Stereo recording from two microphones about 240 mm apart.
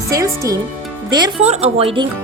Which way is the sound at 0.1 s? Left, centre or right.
Centre.